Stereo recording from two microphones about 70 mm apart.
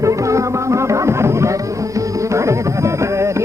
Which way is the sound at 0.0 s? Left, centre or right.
Right.